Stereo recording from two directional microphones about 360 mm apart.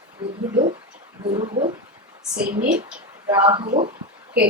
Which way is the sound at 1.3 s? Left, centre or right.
Centre.